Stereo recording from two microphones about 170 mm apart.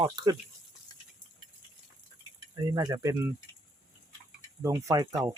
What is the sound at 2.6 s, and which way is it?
Speech, 20° right (ahead or behind).